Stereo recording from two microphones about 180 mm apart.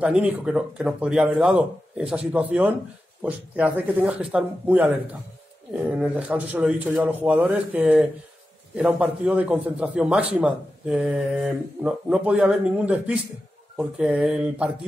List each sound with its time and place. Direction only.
0.0 s a man's voice: 5° right (ahead or behind)